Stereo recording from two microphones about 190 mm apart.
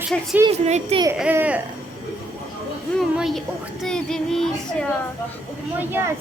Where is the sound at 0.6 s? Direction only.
35° right (ahead or behind).